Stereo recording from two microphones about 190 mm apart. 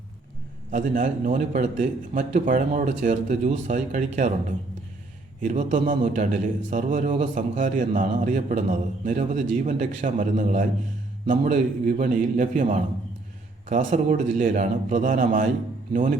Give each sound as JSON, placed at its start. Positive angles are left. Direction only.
{"t": 0.7, "sound": "a man's voice", "side_deg": -45}
{"t": 5.4, "sound": "a man's voice", "side_deg": -45}